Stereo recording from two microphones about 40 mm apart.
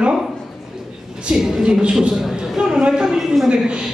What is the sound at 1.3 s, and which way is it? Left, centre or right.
A man's voice, centre.